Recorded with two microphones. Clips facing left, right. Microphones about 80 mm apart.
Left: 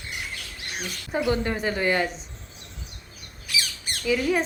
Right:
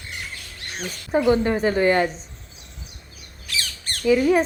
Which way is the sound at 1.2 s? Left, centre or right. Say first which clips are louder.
Right 6 dB; right.